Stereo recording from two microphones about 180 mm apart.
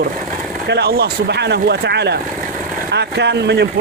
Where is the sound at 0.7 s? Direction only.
65° right (ahead or behind).